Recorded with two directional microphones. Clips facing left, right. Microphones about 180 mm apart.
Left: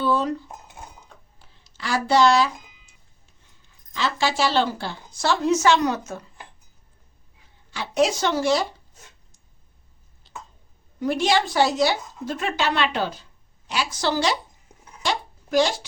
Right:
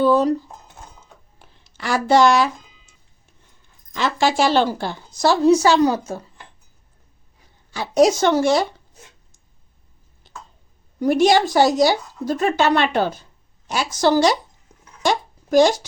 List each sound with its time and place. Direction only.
0.0 s speech: 40° right (ahead or behind)
1.4 s a sound: 55° right (ahead or behind)
3.9 s a woman's voice: 50° right (ahead or behind); by 6.0 s 35° right (ahead or behind)
7.7 s speech: 40° right (ahead or behind)
11.0 s speech: 45° right (ahead or behind)
15.0 s a sound: 45° right (ahead or behind)